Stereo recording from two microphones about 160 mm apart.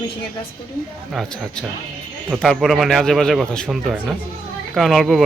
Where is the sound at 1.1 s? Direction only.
Centre (ahead or behind).